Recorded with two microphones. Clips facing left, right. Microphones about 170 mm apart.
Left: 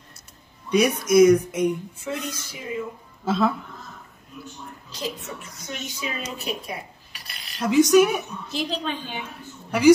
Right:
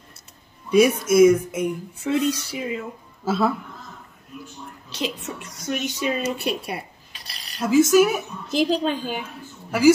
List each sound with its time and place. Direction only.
0.7 s speech: 5° right (ahead or behind)
2.0 s speech: 65° right (ahead or behind)
3.3 s speech: 5° right (ahead or behind)
4.8 s speech: 75° right (ahead or behind)
7.1 s cutlery: 35° right (ahead or behind)
7.6 s speech: 5° right (ahead or behind)
8.5 s a woman's voice: 40° right (ahead or behind)
9.7 s speech: 5° right (ahead or behind)